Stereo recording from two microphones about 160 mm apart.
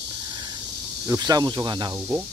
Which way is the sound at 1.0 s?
20° right (ahead or behind).